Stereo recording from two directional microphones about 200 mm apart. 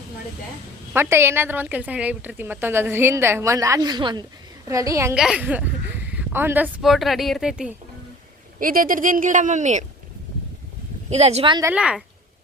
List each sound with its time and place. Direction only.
0.9 s a woman's voice: 10° right (ahead or behind)
5.1 s speech: 5° right (ahead or behind)
8.5 s speech: 45° right (ahead or behind)
11.1 s speech: 30° right (ahead or behind)
11.6 s speech: 5° right (ahead or behind)